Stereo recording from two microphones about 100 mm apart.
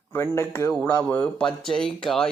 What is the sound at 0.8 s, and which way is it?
Speech, 15° left (ahead or behind).